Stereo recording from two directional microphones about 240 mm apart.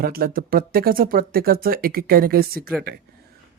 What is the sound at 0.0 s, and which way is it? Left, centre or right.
Speech, right.